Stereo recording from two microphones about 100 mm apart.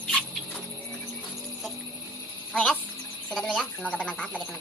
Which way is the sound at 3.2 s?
10° left (ahead or behind).